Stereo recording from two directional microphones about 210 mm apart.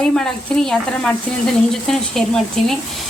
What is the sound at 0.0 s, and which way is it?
Speech, centre (ahead or behind).